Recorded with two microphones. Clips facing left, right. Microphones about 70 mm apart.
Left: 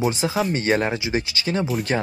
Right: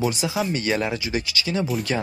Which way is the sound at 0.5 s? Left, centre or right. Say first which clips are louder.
Left 3 dB; left.